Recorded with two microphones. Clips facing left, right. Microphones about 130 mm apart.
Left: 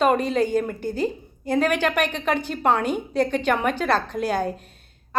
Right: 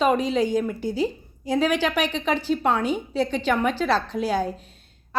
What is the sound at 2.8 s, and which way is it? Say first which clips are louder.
A woman's voice: left 1 dB; 50° left (ahead or behind).